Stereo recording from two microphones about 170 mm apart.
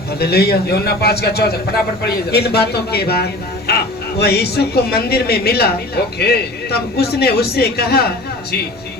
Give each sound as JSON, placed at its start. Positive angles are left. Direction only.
{"t": 0.2, "sound": "a man's voice", "side_deg": 70}